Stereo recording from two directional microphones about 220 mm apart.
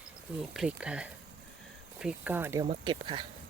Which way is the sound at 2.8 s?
20° right (ahead or behind).